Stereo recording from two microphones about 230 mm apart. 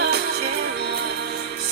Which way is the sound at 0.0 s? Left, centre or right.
Right.